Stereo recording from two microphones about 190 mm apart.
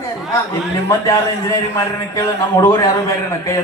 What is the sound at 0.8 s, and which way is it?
A man's voice, 15° left (ahead or behind).